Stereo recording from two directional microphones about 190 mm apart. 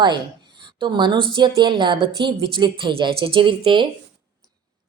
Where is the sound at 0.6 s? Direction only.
25° right (ahead or behind).